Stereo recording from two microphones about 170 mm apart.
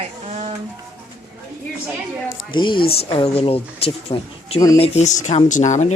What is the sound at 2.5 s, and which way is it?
Speech, 30° left (ahead or behind).